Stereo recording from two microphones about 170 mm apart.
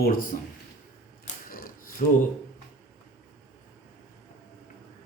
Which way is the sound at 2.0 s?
55° left (ahead or behind).